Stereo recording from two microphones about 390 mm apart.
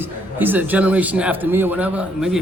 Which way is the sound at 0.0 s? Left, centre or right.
Centre.